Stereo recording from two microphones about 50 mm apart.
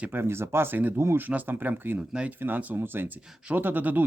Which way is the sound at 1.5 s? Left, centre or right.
Right.